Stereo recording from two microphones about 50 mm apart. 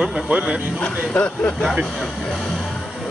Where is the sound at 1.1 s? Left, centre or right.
Left.